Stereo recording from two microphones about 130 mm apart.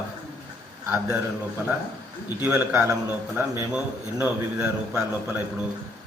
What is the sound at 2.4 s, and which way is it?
A man's voice, 20° right (ahead or behind).